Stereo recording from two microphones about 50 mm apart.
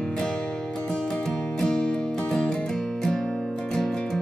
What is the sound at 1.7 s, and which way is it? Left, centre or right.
Music, left.